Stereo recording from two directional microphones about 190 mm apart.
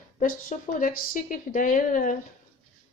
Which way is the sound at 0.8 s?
45° left (ahead or behind).